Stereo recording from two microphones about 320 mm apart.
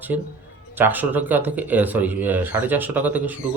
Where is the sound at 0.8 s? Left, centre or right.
Centre.